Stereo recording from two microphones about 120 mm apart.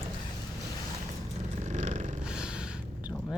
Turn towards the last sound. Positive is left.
turn(degrees=-5)  # may be behind; listen again after turning